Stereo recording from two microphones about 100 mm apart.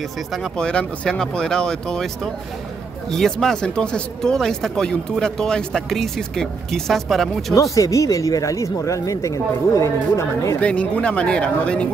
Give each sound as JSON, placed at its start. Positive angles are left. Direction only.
{"t": 0.3, "sound": "speech", "side_deg": 5}
{"t": 3.1, "sound": "speech", "side_deg": 5}
{"t": 7.5, "sound": "speech", "side_deg": 35}
{"t": 10.6, "sound": "speech", "side_deg": 10}